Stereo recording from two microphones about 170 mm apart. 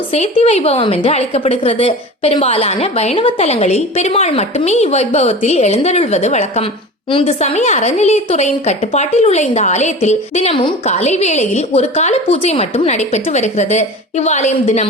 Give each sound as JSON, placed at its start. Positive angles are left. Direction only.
{"t": 0.1, "sound": "a woman's voice", "side_deg": 40}